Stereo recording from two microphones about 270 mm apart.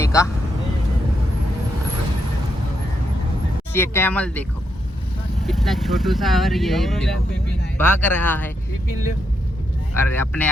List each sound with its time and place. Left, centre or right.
0.0 s vehicle: centre
3.7 s speech: centre
5.5 s speech: centre
9.9 s speech: centre